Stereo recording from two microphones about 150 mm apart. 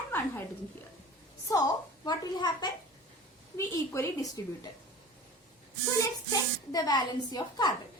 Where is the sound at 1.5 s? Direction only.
25° left (ahead or behind).